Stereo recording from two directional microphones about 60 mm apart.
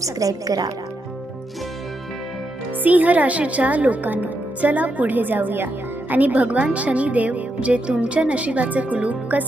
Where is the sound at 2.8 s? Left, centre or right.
Right.